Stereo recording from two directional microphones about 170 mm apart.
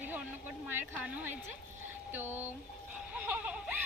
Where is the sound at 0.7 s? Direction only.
10° right (ahead or behind).